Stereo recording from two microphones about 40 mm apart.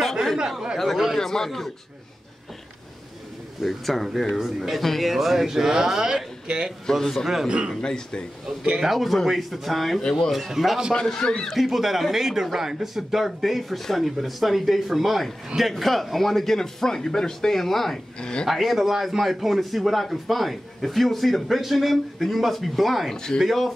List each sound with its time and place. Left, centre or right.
0.0 s a sound: centre
0.7 s a man's voice: centre
3.6 s a man's voice: centre; by 6.7 s right
6.9 s a man's voice: centre
7.4 s speech: right
7.8 s speech: left
8.7 s a man's voice: centre
11.2 s speech: centre
11.5 s a man's voice: centre
18.2 s speech: left
18.5 s a man's voice: centre
23.1 s a man's voice: centre
23.4 s a man's voice: centre